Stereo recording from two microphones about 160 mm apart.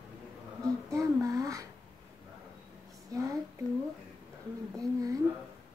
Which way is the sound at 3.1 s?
20° right (ahead or behind).